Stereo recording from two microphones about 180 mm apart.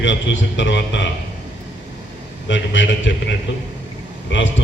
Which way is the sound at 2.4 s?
90° left.